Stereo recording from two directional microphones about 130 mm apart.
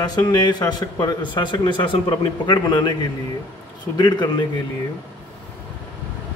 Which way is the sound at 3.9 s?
35° left (ahead or behind).